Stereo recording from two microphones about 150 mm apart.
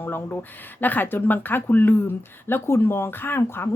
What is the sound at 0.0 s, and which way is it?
A woman's voice, 15° left (ahead or behind).